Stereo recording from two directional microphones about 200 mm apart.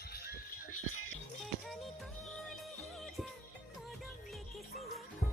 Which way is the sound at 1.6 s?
Centre (ahead or behind).